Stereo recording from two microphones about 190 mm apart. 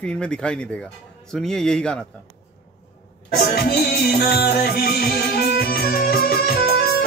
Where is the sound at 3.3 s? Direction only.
55° left (ahead or behind).